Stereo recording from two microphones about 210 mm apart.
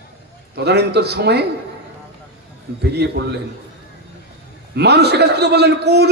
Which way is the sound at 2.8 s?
50° right (ahead or behind).